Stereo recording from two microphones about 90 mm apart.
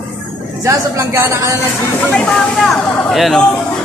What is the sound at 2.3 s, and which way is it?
Speech, 5° left (ahead or behind).